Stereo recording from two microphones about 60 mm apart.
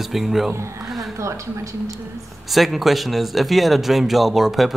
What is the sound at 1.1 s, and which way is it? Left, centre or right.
Speech, right.